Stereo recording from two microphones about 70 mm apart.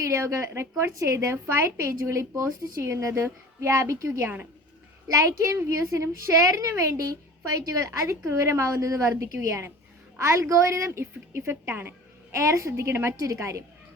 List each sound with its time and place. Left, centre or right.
0.0 s a woman's voice: right